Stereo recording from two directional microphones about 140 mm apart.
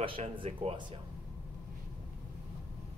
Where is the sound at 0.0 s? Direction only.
40° right (ahead or behind).